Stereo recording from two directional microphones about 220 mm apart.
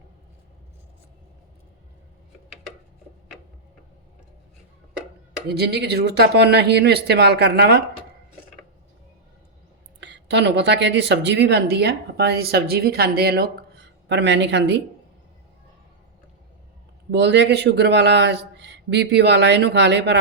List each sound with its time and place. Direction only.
5.5 s speech: 45° right (ahead or behind)
10.0 s speech: 50° right (ahead or behind)
17.1 s speech: 50° right (ahead or behind)